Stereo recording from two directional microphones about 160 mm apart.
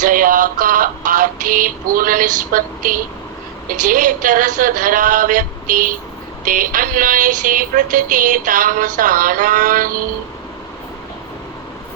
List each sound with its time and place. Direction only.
0.0 s music: 60° right (ahead or behind)
3.7 s speech: 55° right (ahead or behind)